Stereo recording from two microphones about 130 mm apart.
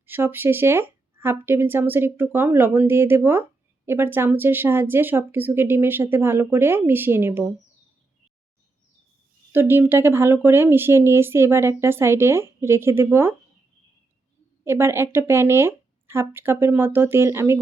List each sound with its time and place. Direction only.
0.0 s speech: 15° right (ahead or behind)
9.5 s speech: 15° right (ahead or behind)
14.6 s speech: 20° right (ahead or behind)